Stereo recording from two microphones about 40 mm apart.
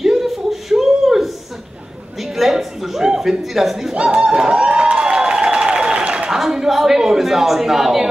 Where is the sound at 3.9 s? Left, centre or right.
Right.